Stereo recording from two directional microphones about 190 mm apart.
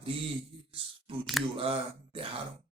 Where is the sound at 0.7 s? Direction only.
25° right (ahead or behind).